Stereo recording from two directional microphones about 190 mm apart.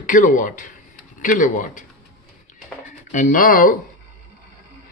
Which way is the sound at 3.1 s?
40° left (ahead or behind).